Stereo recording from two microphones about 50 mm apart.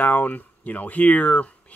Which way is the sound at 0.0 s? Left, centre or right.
Left.